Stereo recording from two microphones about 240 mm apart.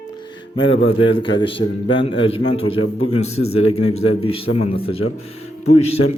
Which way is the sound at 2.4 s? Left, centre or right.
Left.